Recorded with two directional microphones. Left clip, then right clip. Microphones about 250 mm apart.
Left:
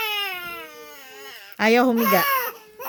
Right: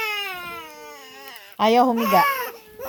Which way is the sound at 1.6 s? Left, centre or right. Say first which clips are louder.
Right 1 dB; left.